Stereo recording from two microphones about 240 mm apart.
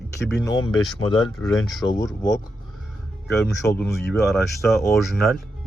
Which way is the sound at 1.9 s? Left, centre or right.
Centre.